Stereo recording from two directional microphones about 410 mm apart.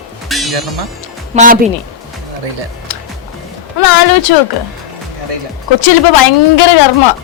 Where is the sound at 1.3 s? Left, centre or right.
Centre.